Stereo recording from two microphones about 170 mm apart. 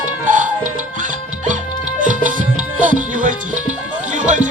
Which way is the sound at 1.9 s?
50° right (ahead or behind).